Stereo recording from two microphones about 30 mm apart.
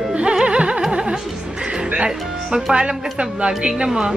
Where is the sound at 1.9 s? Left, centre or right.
Right.